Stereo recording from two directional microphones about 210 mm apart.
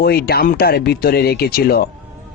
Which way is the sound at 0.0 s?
45° left (ahead or behind).